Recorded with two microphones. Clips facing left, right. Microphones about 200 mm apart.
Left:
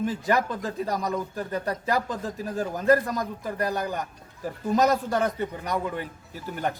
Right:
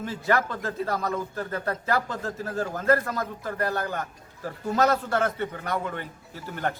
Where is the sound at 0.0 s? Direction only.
15° left (ahead or behind).